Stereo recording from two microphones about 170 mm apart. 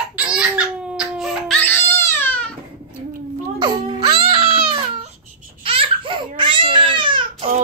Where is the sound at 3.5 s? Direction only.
30° right (ahead or behind).